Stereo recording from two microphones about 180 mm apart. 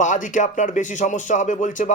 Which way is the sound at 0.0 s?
45° left (ahead or behind).